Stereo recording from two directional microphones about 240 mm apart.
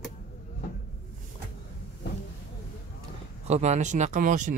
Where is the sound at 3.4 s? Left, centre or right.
Right.